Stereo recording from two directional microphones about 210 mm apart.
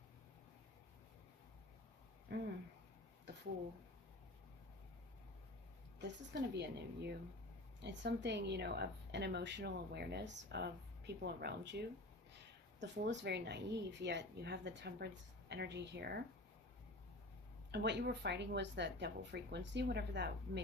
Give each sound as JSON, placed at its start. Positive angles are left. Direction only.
{"t": 2.3, "sound": "speech", "side_deg": -50}
{"t": 6.5, "sound": "a woman's voice", "side_deg": -55}
{"t": 17.7, "sound": "a woman's voice", "side_deg": -55}